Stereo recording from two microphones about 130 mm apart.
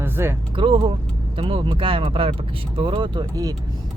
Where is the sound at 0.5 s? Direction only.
40° right (ahead or behind).